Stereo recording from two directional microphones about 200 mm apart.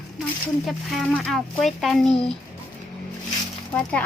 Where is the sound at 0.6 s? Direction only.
Centre (ahead or behind).